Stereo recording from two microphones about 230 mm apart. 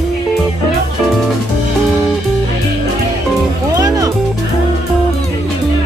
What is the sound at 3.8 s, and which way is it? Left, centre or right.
Music, centre.